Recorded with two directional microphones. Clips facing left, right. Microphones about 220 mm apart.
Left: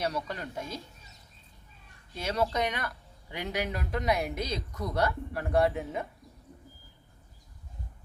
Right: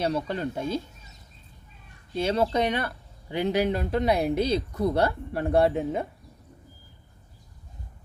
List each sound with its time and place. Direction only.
0.0 s speech: 25° right (ahead or behind)
2.1 s speech: 30° right (ahead or behind)